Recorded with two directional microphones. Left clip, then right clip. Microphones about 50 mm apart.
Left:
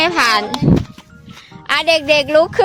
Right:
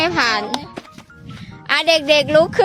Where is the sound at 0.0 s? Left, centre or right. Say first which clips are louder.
Left 4 dB; left.